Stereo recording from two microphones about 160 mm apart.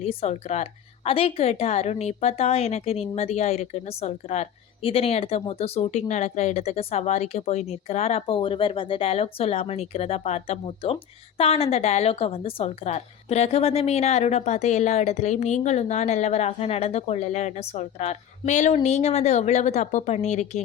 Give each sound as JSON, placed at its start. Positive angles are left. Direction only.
{"t": 0.0, "sound": "a woman's voice", "side_deg": 40}